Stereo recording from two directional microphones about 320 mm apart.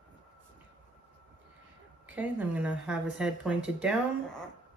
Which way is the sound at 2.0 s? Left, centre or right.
Centre.